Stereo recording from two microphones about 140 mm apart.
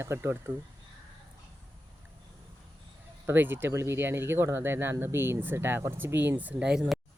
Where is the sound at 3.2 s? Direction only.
15° right (ahead or behind).